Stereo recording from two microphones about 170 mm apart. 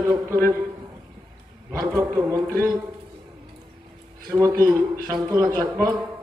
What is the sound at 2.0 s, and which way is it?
Speech, 15° right (ahead or behind).